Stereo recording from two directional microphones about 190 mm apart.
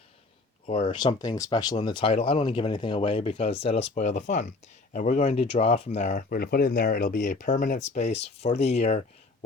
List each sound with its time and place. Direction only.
0.6 s speech: 25° left (ahead or behind)